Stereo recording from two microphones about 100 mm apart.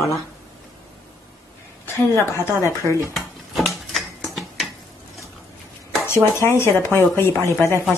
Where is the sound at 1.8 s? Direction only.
25° left (ahead or behind).